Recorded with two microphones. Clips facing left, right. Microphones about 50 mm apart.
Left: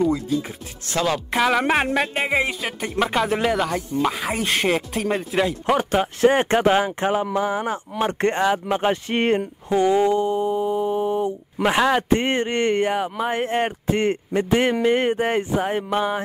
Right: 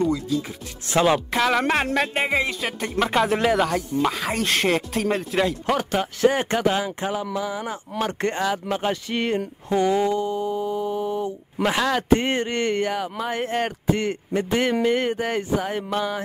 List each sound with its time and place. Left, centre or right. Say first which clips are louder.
0.1 s a man's voice: left 1 dB; left
0.9 s speech: right 3 dB; right
1.3 s speech: left 2 dB; centre
2.6 s speech: left 1 dB; centre
5.8 s a man's voice: left 3 dB; left
9.7 s speech: left 3 dB; centre
10.1 s mantra: left 4 dB; left
11.6 s a man's voice: left 3 dB; centre
14.3 s a man's voice: left 1 dB; centre